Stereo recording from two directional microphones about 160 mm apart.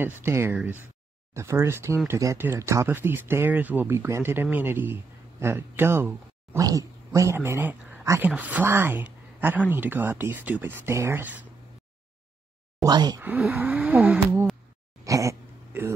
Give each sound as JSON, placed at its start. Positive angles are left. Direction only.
{"t": 0.0, "sound": "speech", "side_deg": -15}
{"t": 12.8, "sound": "speech", "side_deg": -25}
{"t": 13.2, "sound": "speech", "side_deg": -10}
{"t": 15.0, "sound": "a sound", "side_deg": -20}